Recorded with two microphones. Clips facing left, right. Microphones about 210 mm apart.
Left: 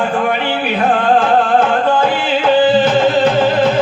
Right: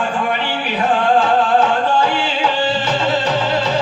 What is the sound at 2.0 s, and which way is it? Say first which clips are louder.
Music: left 4 dB; 55° left (ahead or behind).